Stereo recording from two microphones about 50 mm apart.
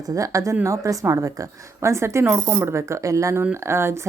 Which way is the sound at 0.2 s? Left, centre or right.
Right.